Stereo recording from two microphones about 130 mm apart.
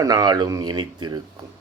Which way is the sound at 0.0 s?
30° right (ahead or behind).